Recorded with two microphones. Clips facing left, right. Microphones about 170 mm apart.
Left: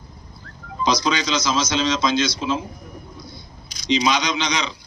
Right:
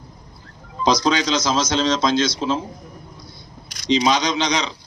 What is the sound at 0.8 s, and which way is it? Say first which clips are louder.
A man's voice: right 3 dB; 40° right (ahead or behind).